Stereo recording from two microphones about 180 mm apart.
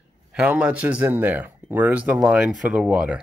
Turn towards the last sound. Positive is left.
turn(degrees=-5)  # may be behind; listen again after turning